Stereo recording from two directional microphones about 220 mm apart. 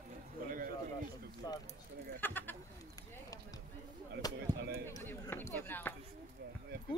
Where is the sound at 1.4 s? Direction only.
20° left (ahead or behind).